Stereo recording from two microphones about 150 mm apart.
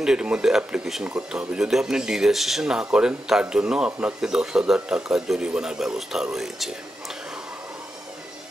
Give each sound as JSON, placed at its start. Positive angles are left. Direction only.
{"t": 0.0, "sound": "speech", "side_deg": -5}